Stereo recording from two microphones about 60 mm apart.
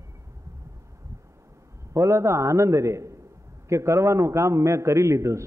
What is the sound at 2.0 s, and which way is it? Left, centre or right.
A man's voice, right.